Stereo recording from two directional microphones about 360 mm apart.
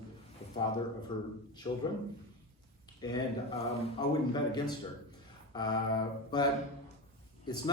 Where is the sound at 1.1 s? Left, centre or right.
Centre.